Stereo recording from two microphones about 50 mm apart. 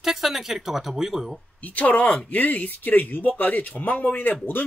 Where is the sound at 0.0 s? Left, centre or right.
Centre.